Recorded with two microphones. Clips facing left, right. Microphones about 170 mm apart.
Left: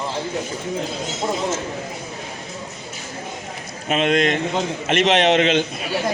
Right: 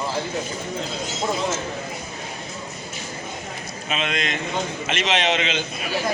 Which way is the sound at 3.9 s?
55° left (ahead or behind).